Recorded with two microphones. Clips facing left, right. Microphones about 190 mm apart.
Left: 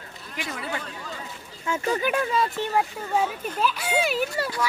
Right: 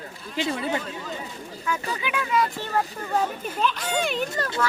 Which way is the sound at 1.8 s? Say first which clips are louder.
Left 4 dB; 40° left (ahead or behind).